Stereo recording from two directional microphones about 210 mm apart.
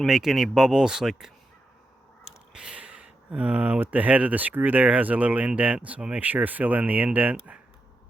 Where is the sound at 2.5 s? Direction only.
5° right (ahead or behind).